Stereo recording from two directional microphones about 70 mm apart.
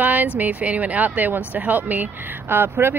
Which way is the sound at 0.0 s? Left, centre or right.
Right.